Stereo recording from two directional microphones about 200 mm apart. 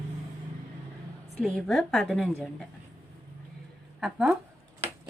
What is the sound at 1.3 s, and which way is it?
Speech, centre (ahead or behind).